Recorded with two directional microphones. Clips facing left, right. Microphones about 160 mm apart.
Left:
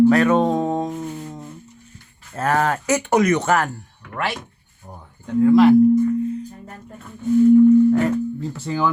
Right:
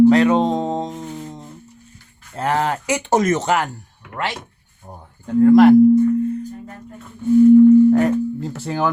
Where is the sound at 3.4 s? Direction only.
15° right (ahead or behind).